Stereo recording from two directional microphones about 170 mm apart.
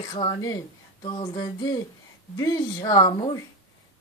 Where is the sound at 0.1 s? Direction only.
25° left (ahead or behind).